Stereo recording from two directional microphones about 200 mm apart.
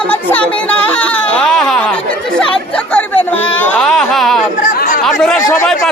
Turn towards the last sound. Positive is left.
turn(degrees=5)  # may be behind; listen again after turning